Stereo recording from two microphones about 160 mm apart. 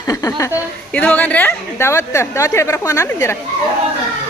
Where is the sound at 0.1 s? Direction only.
20° left (ahead or behind).